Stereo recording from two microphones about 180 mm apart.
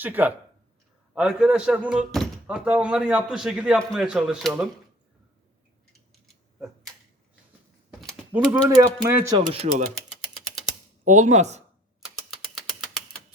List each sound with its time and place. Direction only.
0.0 s speech: 10° right (ahead or behind)
8.3 s speech: 10° right (ahead or behind)
9.0 s speech: 30° right (ahead or behind)
11.0 s speech: 40° right (ahead or behind)
12.0 s typing: centre (ahead or behind)